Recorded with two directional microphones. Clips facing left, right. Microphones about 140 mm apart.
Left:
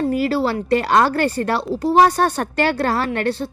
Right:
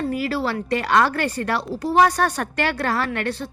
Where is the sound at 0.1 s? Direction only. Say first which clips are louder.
Left 5 dB; 30° left (ahead or behind).